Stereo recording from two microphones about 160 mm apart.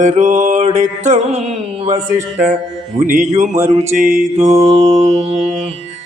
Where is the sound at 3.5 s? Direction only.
20° right (ahead or behind).